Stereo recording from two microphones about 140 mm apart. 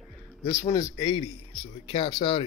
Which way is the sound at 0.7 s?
25° left (ahead or behind).